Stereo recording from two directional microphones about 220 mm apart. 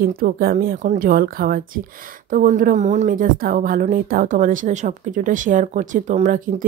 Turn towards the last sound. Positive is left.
turn(degrees=-35)  # may be behind; listen again after turning